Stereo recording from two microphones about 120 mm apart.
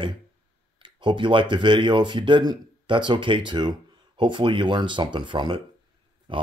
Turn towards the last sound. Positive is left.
turn(degrees=-45)  # may be behind; listen again after turning